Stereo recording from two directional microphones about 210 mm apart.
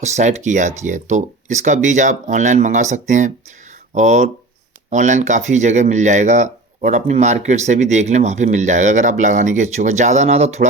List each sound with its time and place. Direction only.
0.0 s speech: 35° right (ahead or behind)